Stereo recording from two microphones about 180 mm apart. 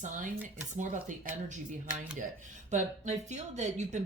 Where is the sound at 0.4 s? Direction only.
45° right (ahead or behind).